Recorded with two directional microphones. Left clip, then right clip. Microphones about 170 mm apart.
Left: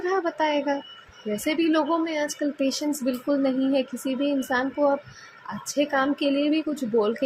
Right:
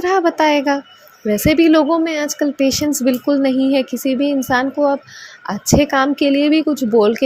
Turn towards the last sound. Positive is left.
turn(degrees=-40)  # may be behind; listen again after turning